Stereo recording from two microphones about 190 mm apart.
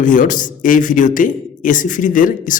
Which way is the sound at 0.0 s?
45° left (ahead or behind).